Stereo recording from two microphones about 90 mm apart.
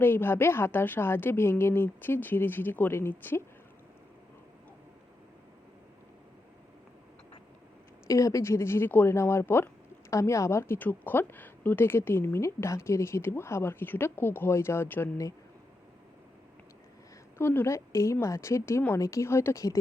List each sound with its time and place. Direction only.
0.0 s a woman's voice: 25° left (ahead or behind)
8.0 s a woman's voice: 35° left (ahead or behind)
17.3 s speech: 25° left (ahead or behind)